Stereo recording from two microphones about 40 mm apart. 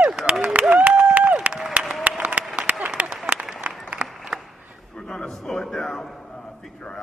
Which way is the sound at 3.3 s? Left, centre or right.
Right.